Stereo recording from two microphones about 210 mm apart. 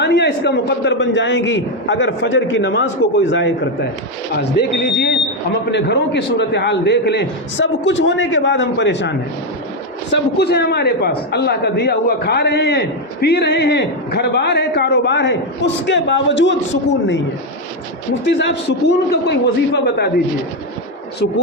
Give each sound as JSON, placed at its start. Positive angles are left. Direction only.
{"t": 0.0, "sound": "a man's voice", "side_deg": 55}